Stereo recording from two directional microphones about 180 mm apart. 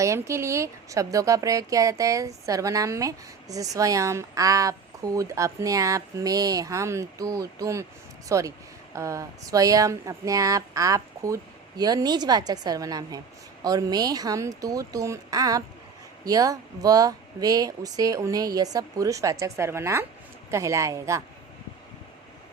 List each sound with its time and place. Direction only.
0.0 s speech: 15° right (ahead or behind)